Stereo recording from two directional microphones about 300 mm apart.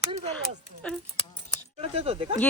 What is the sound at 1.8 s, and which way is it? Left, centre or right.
Speech, centre.